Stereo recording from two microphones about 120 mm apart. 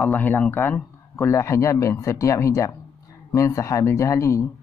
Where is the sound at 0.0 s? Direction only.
15° left (ahead or behind).